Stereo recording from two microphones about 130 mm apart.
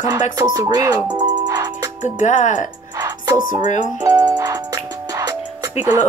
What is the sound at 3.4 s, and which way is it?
Speech, 80° left.